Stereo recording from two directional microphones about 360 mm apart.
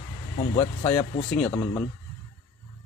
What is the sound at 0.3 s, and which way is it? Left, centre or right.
Speech, centre.